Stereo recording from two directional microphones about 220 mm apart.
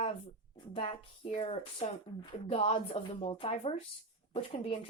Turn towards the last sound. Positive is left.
turn(degrees=25)  # may be behind; listen again after turning